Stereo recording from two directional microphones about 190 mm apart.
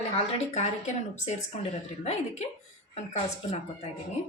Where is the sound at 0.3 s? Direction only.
35° left (ahead or behind).